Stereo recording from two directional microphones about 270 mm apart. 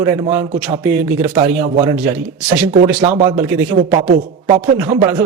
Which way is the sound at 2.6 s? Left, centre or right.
Right.